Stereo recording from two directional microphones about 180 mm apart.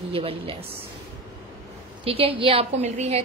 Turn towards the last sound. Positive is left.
turn(degrees=-35)  # may be behind; listen again after turning